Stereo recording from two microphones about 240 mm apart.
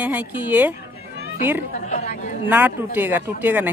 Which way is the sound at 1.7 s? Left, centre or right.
Left.